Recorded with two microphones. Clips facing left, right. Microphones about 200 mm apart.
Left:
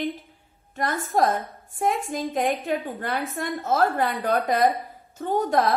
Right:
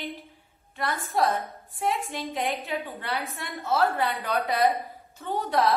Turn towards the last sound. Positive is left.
turn(degrees=50)  # may be behind; listen again after turning